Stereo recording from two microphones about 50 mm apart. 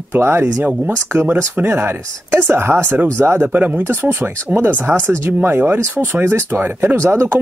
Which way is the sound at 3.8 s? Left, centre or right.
Right.